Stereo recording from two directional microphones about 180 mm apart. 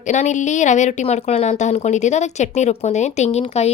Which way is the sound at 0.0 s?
45° left (ahead or behind).